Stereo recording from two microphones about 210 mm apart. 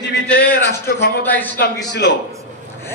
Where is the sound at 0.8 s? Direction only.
50° left (ahead or behind).